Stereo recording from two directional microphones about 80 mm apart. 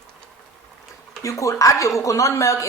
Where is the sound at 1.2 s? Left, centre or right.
Left.